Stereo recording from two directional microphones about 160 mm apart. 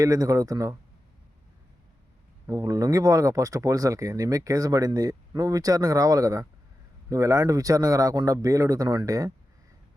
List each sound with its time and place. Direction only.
0.0 s speech: 20° right (ahead or behind)
2.5 s speech: 20° right (ahead or behind)